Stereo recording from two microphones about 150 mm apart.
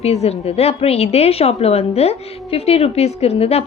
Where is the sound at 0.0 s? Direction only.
45° left (ahead or behind).